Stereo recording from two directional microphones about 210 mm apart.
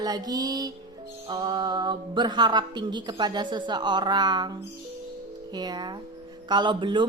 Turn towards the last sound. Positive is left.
turn(degrees=-20)  # may be behind; listen again after turning